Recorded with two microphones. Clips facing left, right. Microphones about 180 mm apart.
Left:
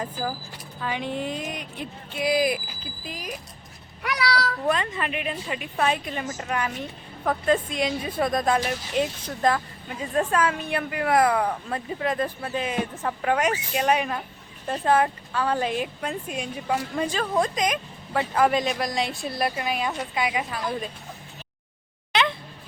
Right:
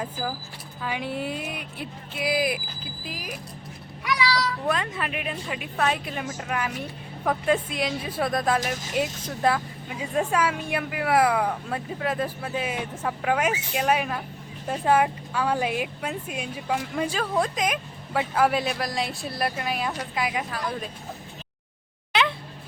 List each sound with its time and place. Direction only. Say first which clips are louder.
0.0 s a woman's voice: left 1 dB; 5° right (ahead or behind)
4.0 s speech: even; 65° left (ahead or behind)
4.7 s a woman's voice: left 2 dB; centre (ahead or behind)